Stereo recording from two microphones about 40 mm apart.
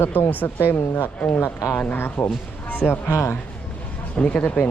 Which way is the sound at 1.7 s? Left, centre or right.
Left.